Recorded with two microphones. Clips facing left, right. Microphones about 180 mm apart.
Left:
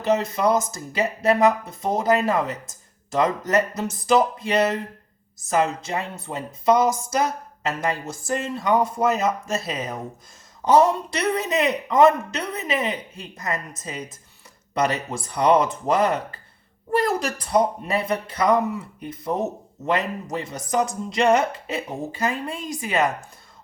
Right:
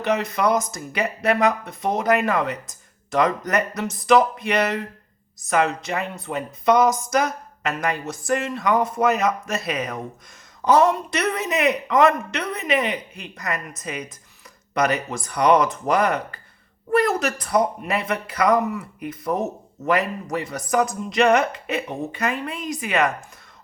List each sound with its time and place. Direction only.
0.1 s speech: 25° left (ahead or behind)